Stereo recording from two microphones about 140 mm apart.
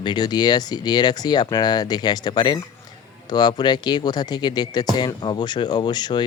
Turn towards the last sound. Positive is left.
turn(degrees=30)  # may be behind; listen again after turning